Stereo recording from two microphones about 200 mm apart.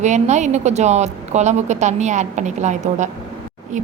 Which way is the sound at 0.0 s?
35° right (ahead or behind).